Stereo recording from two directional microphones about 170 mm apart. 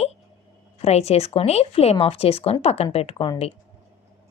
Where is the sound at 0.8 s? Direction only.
40° left (ahead or behind).